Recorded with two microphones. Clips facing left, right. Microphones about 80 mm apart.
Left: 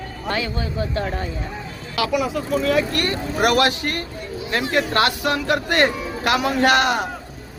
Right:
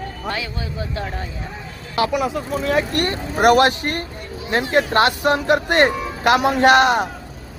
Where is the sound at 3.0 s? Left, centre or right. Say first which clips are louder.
Right 2 dB; right.